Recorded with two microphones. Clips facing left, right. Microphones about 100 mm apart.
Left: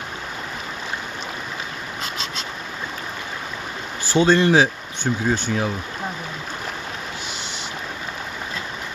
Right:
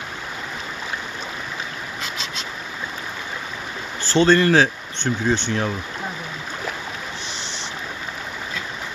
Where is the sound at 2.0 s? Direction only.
45° left (ahead or behind).